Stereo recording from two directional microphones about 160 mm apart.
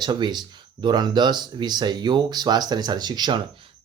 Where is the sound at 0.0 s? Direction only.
25° right (ahead or behind).